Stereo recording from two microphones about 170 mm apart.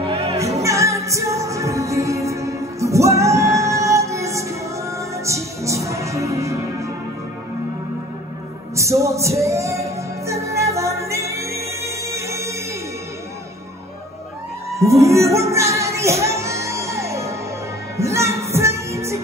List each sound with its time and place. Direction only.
0.0 s music: 35° right (ahead or behind)
0.4 s music: 20° right (ahead or behind)
8.7 s music: 15° right (ahead or behind)
14.8 s music: 15° right (ahead or behind)